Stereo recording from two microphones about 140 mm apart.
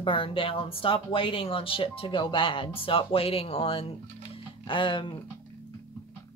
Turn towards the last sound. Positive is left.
turn(degrees=35)  # may be behind; listen again after turning